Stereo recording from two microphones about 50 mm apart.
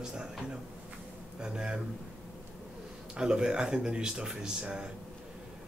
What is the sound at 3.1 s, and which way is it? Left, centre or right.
Speech, centre.